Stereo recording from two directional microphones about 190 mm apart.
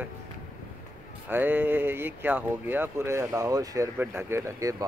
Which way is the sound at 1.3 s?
10° right (ahead or behind).